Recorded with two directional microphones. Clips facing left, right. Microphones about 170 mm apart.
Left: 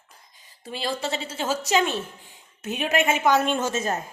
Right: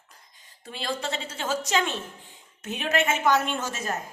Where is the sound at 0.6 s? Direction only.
5° left (ahead or behind); by 3.9 s 25° left (ahead or behind).